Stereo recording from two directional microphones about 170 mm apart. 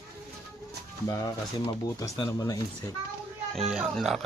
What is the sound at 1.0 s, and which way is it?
Speech, 20° left (ahead or behind).